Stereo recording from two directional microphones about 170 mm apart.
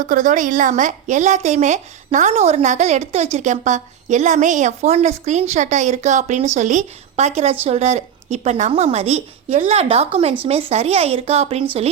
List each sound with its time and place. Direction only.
0.1 s a woman's voice: 50° right (ahead or behind)